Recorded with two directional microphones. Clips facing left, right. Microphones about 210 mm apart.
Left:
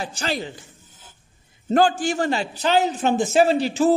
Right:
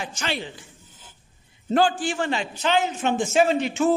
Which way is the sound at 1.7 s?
45° left (ahead or behind).